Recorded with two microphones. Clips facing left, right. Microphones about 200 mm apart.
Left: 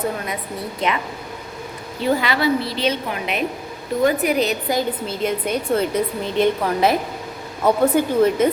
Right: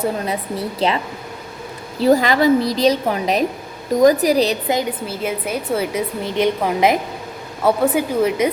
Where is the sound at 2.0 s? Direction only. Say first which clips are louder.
Right 6 dB; 40° right (ahead or behind).